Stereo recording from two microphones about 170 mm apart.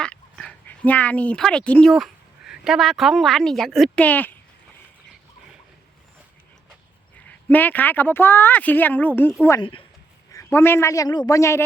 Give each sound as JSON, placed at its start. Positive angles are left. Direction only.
{"t": 0.0, "sound": "speech", "side_deg": 5}
{"t": 7.3, "sound": "speech", "side_deg": 10}
{"t": 9.6, "sound": "speech", "side_deg": 30}
{"t": 10.3, "sound": "speech", "side_deg": 15}